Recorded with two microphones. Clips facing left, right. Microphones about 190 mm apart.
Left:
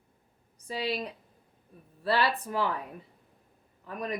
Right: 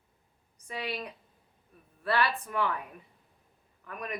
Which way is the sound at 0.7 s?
30° left (ahead or behind).